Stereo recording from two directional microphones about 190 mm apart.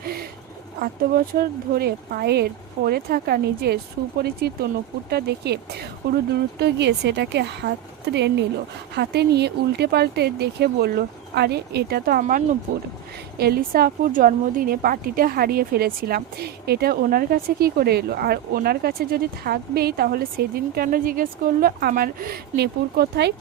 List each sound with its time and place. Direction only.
0.0 s a sound: 50° right (ahead or behind)
0.8 s a woman's voice: 50° right (ahead or behind)
6.6 s speech: 60° right (ahead or behind)
13.4 s a woman's voice: 55° right (ahead or behind)